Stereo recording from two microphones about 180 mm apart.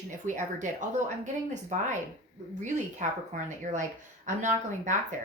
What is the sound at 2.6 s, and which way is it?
Speech, 40° right (ahead or behind).